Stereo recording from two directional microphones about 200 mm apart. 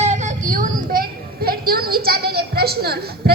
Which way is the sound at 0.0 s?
35° right (ahead or behind).